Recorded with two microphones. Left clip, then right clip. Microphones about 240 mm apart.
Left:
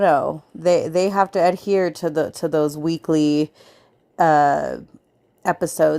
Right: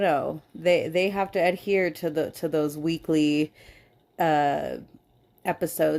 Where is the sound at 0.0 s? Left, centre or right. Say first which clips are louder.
Left 7 dB; centre.